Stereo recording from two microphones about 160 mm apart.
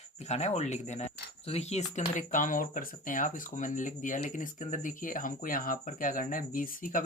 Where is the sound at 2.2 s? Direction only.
55° left (ahead or behind).